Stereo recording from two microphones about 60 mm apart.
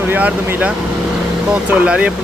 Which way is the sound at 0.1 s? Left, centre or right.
Right.